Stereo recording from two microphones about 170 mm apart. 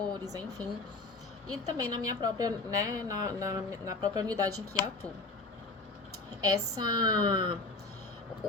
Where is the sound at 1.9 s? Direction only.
20° right (ahead or behind).